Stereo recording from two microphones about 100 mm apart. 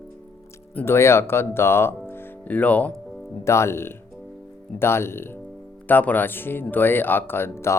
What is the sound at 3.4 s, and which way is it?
Speech, 25° left (ahead or behind).